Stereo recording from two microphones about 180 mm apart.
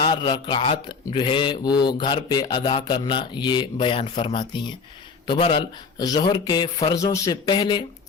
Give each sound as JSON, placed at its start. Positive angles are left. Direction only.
{"t": 0.0, "sound": "speech", "side_deg": 25}